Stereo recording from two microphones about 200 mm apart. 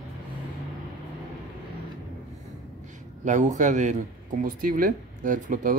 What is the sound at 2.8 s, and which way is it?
A man's voice, 40° right (ahead or behind).